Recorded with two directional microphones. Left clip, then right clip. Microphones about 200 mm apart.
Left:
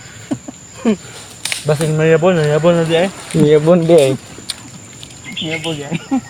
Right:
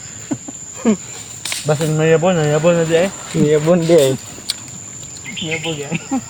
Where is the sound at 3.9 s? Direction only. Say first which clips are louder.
Left 2 dB; centre (ahead or behind).